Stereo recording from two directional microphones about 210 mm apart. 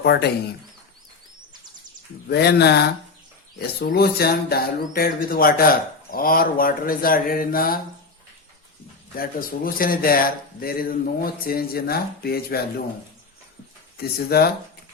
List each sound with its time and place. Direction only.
0.0 s speech: 50° left (ahead or behind)
2.3 s speech: 50° left (ahead or behind)
9.1 s speech: 45° left (ahead or behind)
13.9 s speech: 45° left (ahead or behind)